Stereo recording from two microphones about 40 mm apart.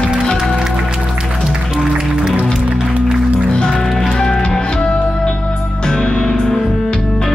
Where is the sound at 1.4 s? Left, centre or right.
Centre.